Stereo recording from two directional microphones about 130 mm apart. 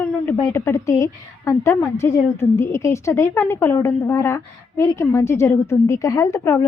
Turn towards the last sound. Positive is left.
turn(degrees=25)  # may be behind; listen again after turning